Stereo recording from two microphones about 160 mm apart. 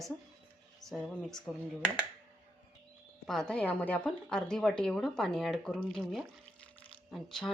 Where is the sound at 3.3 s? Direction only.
5° left (ahead or behind).